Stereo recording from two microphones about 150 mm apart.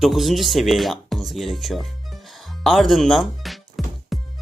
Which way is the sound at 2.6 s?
Centre (ahead or behind).